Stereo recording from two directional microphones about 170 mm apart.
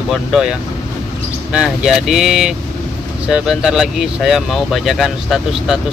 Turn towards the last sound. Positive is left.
turn(degrees=0)  # may be behind; listen again after turning